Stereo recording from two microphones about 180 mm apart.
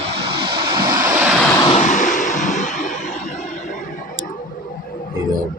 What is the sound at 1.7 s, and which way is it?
Vehicle, 40° left (ahead or behind).